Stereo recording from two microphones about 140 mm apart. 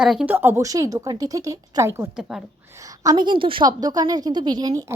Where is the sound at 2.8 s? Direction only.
25° right (ahead or behind).